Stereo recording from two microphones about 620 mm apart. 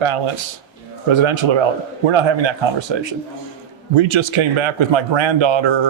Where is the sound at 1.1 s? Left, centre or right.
Right.